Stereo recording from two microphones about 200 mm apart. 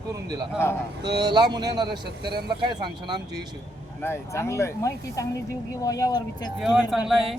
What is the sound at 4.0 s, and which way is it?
Speech, 10° left (ahead or behind).